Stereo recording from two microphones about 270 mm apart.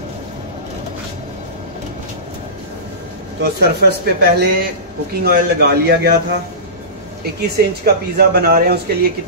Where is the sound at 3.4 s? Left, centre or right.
Right.